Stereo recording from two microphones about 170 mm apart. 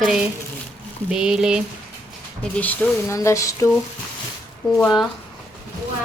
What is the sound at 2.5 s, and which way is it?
Speech, 10° left (ahead or behind).